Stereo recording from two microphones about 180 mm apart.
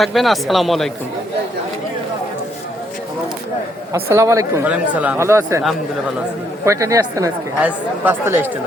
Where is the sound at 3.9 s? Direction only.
15° right (ahead or behind).